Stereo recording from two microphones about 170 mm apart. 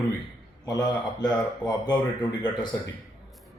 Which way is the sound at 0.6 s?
25° left (ahead or behind).